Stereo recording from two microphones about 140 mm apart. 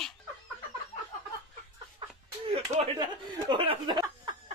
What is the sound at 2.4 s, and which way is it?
Speech, 45° right (ahead or behind).